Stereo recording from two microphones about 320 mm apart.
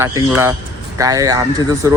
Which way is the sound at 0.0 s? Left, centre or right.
Centre.